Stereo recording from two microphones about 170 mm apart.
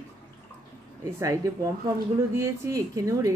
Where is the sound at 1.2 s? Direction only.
20° right (ahead or behind).